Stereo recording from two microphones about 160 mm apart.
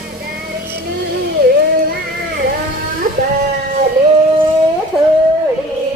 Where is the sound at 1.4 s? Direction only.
70° right (ahead or behind).